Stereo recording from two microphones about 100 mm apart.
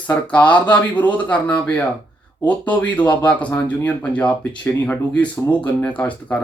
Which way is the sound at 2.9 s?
15° left (ahead or behind).